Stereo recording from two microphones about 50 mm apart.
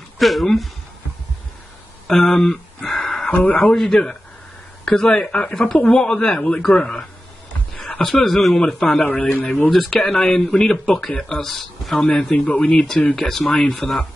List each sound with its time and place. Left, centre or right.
0.2 s speech: centre
2.0 s a sound: centre
3.3 s speech: left
3.7 s speech: centre
4.8 s speech: centre
8.0 s speech: centre
9.1 s speech: left
9.7 s speech: centre
12.0 s speech: centre
12.4 s speech: left
13.1 s speech: centre
13.5 s speech: left
13.7 s speech: centre